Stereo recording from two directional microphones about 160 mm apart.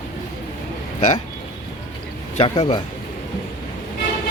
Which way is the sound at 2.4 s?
35° left (ahead or behind).